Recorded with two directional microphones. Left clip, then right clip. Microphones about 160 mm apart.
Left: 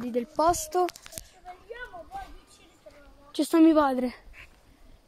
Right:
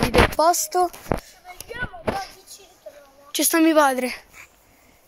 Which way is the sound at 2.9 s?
80° right.